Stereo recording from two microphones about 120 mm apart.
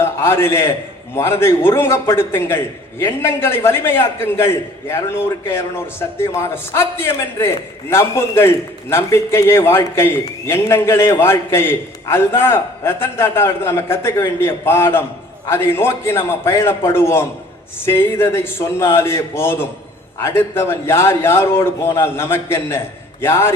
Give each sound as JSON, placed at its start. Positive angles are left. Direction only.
{"t": 0.0, "sound": "a man's voice", "side_deg": 20}